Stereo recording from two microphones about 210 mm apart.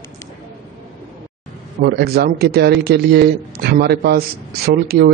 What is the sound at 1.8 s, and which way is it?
A man's voice, 50° right (ahead or behind).